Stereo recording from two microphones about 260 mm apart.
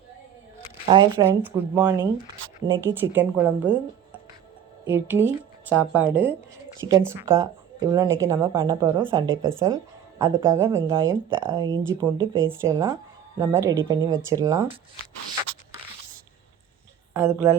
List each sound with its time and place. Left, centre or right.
0.9 s a woman's voice: centre
1.4 s a woman's voice: centre
4.9 s a woman's voice: centre
9.2 s speech: right
10.2 s a woman's voice: centre
12.2 s speech: right
12.6 s a woman's voice: centre
17.2 s a woman's voice: centre